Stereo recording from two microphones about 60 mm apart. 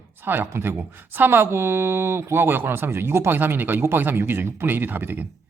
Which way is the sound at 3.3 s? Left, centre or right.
Right.